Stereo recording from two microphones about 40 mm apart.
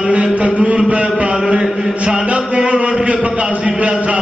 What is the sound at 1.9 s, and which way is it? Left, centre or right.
Mantra, right.